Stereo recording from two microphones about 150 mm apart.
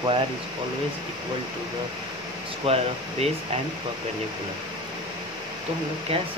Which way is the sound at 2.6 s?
40° right (ahead or behind).